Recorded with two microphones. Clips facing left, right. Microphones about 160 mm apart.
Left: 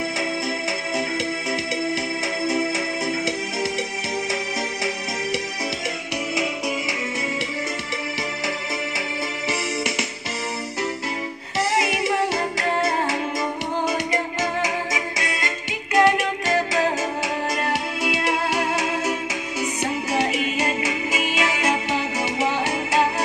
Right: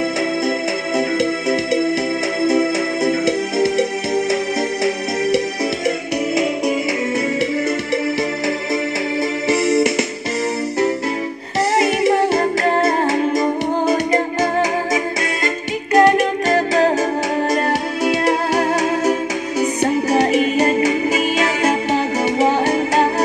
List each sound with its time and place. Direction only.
0.9 s music: 60° right (ahead or behind)
9.7 s music: 65° right (ahead or behind)
11.7 s music: 45° right (ahead or behind)